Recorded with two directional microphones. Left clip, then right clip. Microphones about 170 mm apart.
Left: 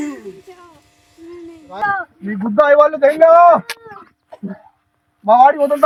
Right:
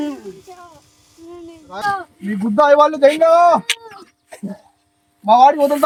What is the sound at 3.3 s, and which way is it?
Speech, 25° right (ahead or behind).